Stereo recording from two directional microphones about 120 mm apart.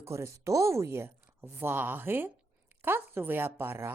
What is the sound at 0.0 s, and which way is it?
A woman's voice, 25° right (ahead or behind).